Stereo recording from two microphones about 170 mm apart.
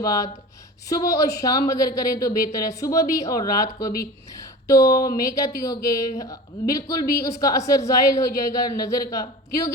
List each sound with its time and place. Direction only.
0.0 s speech: 20° left (ahead or behind)